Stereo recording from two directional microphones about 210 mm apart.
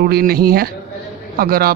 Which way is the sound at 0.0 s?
45° right (ahead or behind).